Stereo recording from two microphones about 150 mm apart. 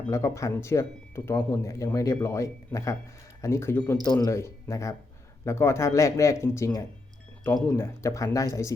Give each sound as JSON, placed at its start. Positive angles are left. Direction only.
{"t": 0.1, "sound": "speech", "side_deg": 20}